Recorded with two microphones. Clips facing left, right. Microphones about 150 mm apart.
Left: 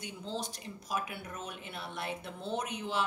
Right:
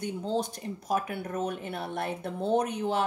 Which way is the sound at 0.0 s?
50° right (ahead or behind).